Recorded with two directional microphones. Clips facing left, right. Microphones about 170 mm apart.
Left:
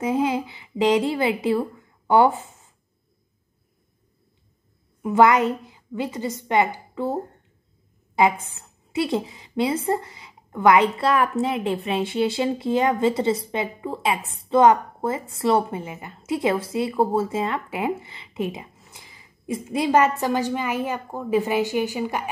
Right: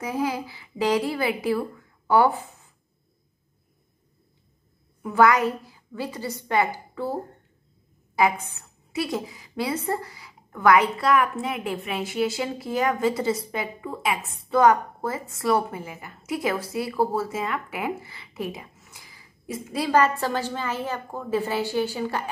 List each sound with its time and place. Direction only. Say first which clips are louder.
0.0 s a woman's voice: left 5 dB; 20° left (ahead or behind)
5.0 s a woman's voice: left 2 dB; 20° left (ahead or behind)
8.2 s a woman's voice: left 2 dB; 25° left (ahead or behind)